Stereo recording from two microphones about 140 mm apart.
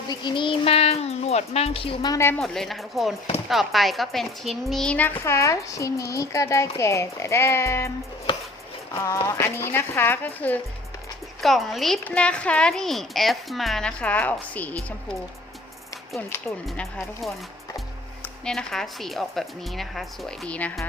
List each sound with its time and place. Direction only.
0.1 s speech: 35° left (ahead or behind)
2.0 s speech: 20° left (ahead or behind)
2.4 s speech: centre (ahead or behind); by 7.9 s 20° left (ahead or behind)
9.2 s speech: 15° left (ahead or behind)
11.3 s speech: centre (ahead or behind)
16.6 s speech: centre (ahead or behind)